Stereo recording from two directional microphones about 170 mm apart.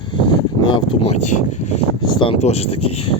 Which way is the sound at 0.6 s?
35° left (ahead or behind).